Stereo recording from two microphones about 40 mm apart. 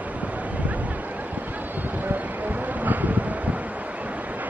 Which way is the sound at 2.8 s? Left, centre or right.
Right.